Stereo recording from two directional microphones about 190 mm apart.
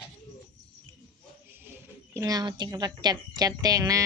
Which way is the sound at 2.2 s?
20° right (ahead or behind).